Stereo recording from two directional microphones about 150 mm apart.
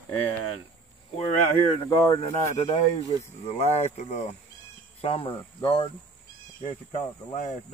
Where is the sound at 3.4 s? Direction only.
45° left (ahead or behind).